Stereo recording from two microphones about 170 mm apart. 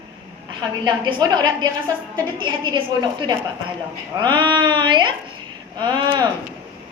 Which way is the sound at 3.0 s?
25° right (ahead or behind).